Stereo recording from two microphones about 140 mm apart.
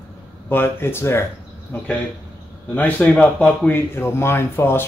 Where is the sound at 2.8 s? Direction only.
10° left (ahead or behind).